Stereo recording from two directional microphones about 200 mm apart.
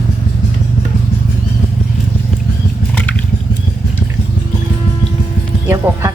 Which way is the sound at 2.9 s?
5° left (ahead or behind).